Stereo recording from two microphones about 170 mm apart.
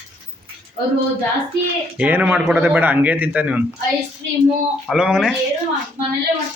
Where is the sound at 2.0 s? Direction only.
10° right (ahead or behind).